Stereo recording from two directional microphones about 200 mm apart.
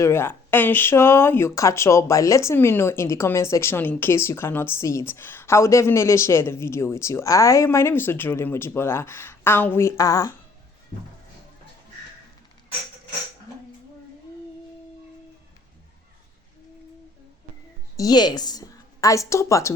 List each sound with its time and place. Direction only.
0.0 s speech: 10° left (ahead or behind)
17.9 s a woman's voice: 20° left (ahead or behind)